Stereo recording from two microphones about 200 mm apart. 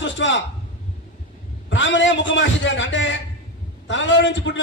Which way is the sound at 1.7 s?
65° left (ahead or behind).